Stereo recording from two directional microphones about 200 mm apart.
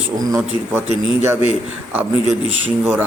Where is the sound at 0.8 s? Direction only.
30° right (ahead or behind).